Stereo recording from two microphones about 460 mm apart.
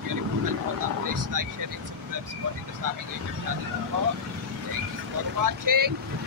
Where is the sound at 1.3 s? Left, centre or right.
Right.